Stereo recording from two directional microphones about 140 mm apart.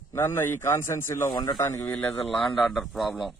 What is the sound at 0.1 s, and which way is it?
Speech, 15° left (ahead or behind).